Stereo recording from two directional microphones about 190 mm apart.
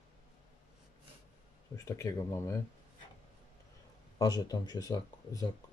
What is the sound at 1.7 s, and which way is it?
Speech, 15° left (ahead or behind).